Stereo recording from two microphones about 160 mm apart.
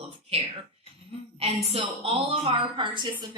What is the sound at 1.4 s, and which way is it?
A woman's voice, 40° right (ahead or behind).